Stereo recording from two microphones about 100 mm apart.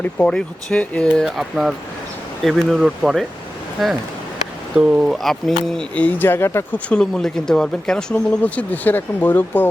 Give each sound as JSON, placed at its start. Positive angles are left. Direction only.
{"t": 0.0, "sound": "speech", "side_deg": 10}
{"t": 1.2, "sound": "speech", "side_deg": 0}
{"t": 5.9, "sound": "speech", "side_deg": 15}
{"t": 6.8, "sound": "speech", "side_deg": 10}